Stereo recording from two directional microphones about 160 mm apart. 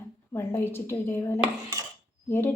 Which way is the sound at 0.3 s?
15° left (ahead or behind).